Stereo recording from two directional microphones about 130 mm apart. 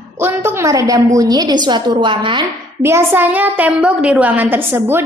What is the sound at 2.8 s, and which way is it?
A woman's voice, 20° right (ahead or behind).